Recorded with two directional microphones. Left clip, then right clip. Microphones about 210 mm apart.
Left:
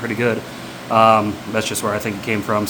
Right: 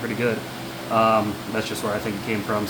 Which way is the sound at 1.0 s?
35° left (ahead or behind).